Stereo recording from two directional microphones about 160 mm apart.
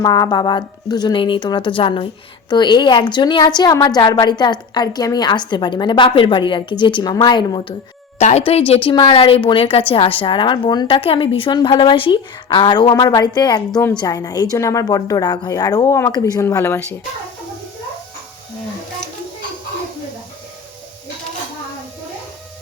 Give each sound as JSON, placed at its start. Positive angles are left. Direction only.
{"t": 0.0, "sound": "a woman's voice", "side_deg": 25}
{"t": 8.2, "sound": "a woman's voice", "side_deg": 45}